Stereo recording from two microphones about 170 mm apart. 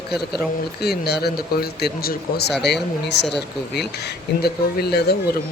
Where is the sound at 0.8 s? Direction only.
70° left (ahead or behind).